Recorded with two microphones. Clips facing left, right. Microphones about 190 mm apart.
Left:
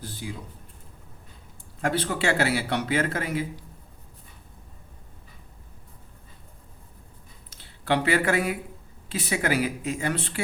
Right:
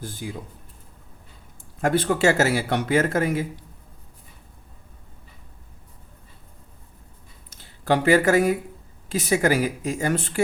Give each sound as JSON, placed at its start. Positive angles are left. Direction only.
{"t": 0.0, "sound": "speech", "side_deg": -50}
{"t": 1.8, "sound": "speech", "side_deg": -50}
{"t": 7.5, "sound": "speech", "side_deg": -45}